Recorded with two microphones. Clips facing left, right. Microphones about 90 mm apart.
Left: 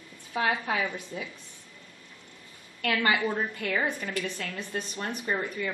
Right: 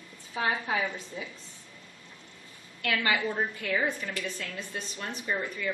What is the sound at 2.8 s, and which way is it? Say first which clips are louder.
A woman's voice: left 2 dB; 50° left (ahead or behind).